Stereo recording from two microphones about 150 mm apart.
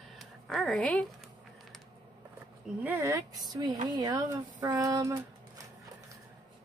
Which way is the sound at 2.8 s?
15° right (ahead or behind).